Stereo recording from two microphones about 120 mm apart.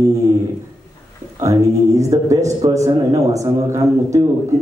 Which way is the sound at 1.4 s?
25° right (ahead or behind).